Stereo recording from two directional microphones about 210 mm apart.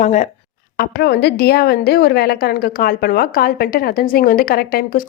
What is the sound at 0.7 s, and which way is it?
A woman's voice, 50° left (ahead or behind).